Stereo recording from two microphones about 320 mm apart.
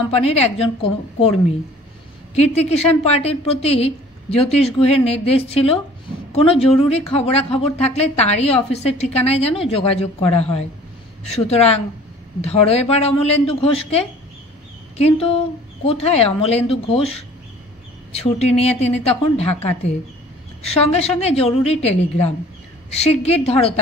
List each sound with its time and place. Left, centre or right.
0.1 s a woman's voice: centre